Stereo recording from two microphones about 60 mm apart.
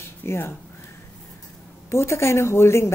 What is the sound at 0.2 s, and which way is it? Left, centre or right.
Speech, left.